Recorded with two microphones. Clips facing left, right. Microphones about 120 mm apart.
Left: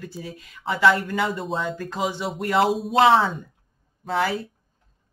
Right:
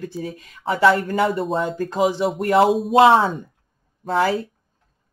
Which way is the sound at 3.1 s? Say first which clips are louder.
Right 3 dB; 40° right (ahead or behind).